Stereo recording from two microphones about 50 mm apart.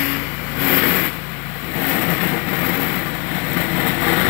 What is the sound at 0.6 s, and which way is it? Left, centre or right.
Vehicle, left.